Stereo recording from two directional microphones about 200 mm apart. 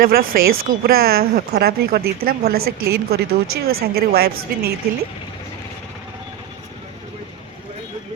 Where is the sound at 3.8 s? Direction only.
50° right (ahead or behind).